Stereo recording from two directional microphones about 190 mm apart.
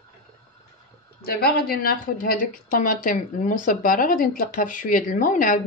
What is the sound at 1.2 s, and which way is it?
Speech, 55° left (ahead or behind).